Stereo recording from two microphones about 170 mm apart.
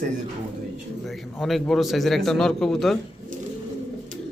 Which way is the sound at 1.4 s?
Centre (ahead or behind).